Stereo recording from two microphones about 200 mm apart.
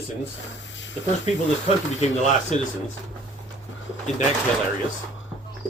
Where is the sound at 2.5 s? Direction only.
35° left (ahead or behind).